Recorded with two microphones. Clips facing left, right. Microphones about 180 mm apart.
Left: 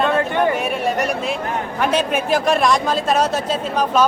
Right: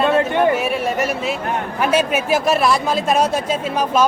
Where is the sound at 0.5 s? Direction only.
Centre (ahead or behind).